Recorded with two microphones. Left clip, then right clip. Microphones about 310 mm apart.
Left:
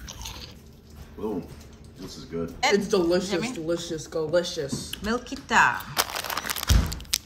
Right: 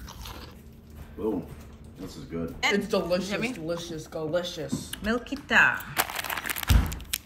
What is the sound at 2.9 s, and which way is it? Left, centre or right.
Speech, left.